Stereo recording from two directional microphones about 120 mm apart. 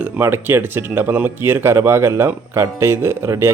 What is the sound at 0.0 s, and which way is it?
Speech, 15° right (ahead or behind).